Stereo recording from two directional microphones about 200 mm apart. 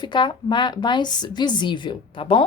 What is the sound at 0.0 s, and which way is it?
A woman's voice, 25° left (ahead or behind).